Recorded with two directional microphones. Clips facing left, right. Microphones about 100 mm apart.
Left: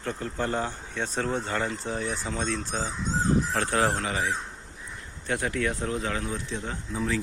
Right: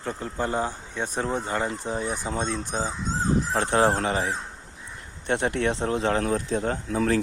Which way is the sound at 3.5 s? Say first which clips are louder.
Right 4 dB; 25° right (ahead or behind).